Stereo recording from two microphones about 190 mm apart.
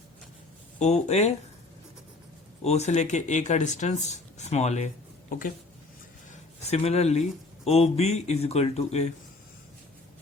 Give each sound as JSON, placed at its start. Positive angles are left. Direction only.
{"t": 0.8, "sound": "speech", "side_deg": 35}
{"t": 2.6, "sound": "speech", "side_deg": 35}
{"t": 6.3, "sound": "speech", "side_deg": 35}